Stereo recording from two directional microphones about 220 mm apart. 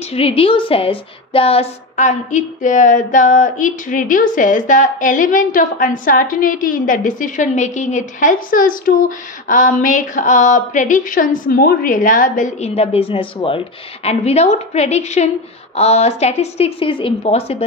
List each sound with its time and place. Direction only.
0.1 s a woman's voice: 25° left (ahead or behind)